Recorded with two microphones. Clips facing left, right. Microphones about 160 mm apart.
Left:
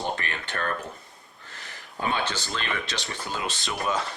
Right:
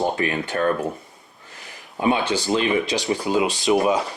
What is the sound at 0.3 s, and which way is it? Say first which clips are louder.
Speech: right 10 dB; 30° right (ahead or behind).